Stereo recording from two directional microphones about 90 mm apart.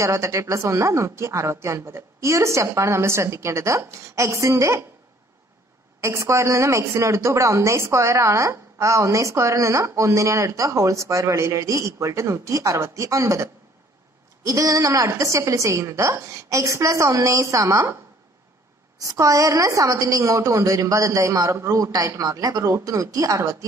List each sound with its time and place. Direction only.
0.0 s a woman's voice: 35° right (ahead or behind)
5.9 s a woman's voice: 35° right (ahead or behind)
18.9 s a woman's voice: 40° right (ahead or behind)